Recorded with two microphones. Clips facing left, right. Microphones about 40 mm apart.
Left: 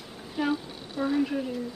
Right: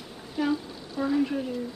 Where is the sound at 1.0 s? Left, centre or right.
Centre.